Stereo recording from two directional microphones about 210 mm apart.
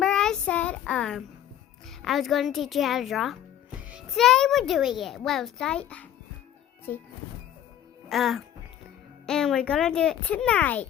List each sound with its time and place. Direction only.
0.0 s child singing: 5° left (ahead or behind)
2.0 s a child's voice: centre (ahead or behind)
8.1 s a child's voice: centre (ahead or behind)